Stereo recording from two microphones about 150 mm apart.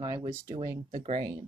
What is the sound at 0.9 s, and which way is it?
Speech, 40° right (ahead or behind).